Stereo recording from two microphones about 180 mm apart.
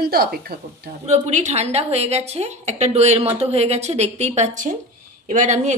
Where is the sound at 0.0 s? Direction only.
55° right (ahead or behind).